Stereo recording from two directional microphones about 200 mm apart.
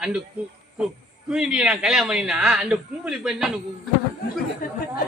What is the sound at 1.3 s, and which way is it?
Speech, 5° right (ahead or behind).